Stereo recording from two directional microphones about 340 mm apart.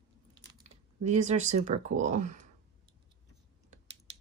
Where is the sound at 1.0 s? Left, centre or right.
Centre.